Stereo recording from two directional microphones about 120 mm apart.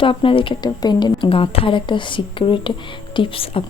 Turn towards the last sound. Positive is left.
turn(degrees=50)  # may be behind; listen again after turning